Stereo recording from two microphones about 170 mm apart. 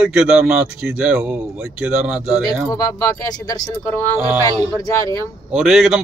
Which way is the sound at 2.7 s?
20° left (ahead or behind).